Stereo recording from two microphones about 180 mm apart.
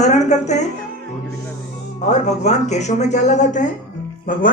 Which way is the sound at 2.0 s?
40° left (ahead or behind).